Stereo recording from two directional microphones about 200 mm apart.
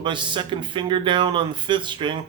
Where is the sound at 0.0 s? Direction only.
25° right (ahead or behind).